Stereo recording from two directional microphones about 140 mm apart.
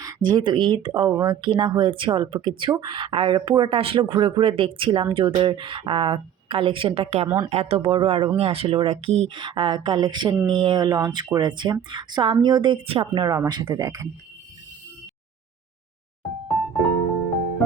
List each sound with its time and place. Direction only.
0.0 s speech: 25° right (ahead or behind); by 7.3 s 45° right (ahead or behind)
7.3 s speech: 25° right (ahead or behind)
7.5 s speech: 45° right (ahead or behind)
13.2 s speech: 25° right (ahead or behind)